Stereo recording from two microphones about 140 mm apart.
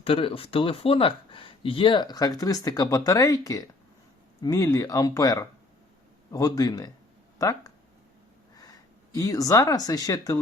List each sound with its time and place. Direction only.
0.0 s speech: 40° left (ahead or behind); by 6.9 s 25° left (ahead or behind)
9.1 s speech: 25° left (ahead or behind)